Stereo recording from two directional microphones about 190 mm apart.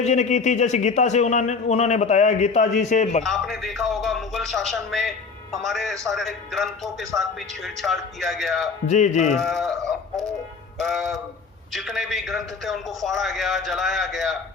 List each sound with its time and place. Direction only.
0.0 s speech: 35° left (ahead or behind)
3.2 s speech: centre (ahead or behind)
8.9 s speech: 40° left (ahead or behind)
9.3 s speech: centre (ahead or behind)
10.8 s speech: centre (ahead or behind)